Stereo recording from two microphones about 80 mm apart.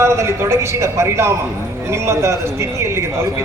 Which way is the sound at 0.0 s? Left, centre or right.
Right.